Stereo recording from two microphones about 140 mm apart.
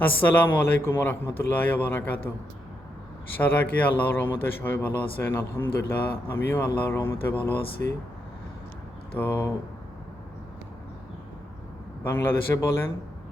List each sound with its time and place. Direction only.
0.0 s a man's voice: 10° left (ahead or behind)
3.3 s a man's voice: 10° left (ahead or behind)
9.1 s a man's voice: 15° left (ahead or behind)
12.0 s a man's voice: 15° left (ahead or behind)